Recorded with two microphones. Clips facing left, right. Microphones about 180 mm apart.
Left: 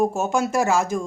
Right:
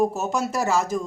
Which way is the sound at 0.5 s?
10° left (ahead or behind).